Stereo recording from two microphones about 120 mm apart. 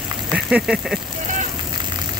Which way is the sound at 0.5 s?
5° right (ahead or behind).